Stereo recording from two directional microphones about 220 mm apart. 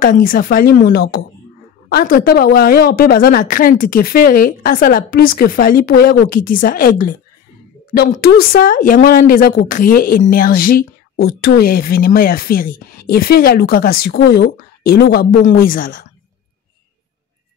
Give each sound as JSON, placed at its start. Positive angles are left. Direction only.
{"t": 0.0, "sound": "a woman's voice", "side_deg": 40}